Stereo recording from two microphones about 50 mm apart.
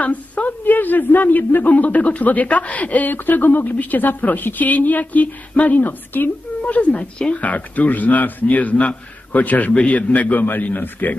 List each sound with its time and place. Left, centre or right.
0.0 s a woman's voice: left
5.8 s a woman's voice: left
6.9 s a woman's voice: centre; by 11.1 s left